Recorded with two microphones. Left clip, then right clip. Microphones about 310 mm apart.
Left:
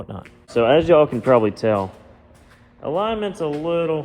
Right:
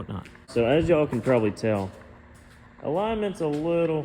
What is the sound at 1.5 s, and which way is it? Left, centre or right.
Speech, left.